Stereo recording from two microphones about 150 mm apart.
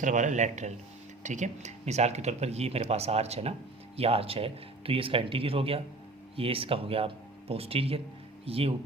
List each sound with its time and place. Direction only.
0.0 s speech: 55° right (ahead or behind); by 8.7 s 40° right (ahead or behind)